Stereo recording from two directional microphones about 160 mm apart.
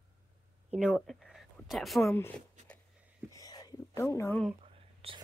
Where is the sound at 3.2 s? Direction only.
20° left (ahead or behind).